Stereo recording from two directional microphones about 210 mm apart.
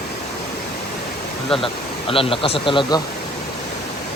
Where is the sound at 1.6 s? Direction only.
25° left (ahead or behind).